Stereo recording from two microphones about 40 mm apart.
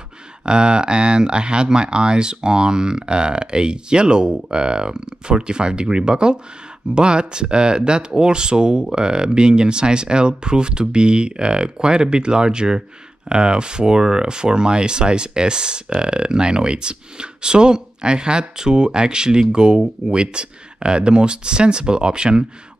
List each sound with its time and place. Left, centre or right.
0.5 s speech: right